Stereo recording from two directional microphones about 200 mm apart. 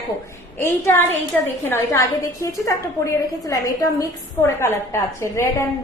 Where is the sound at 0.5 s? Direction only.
10° left (ahead or behind).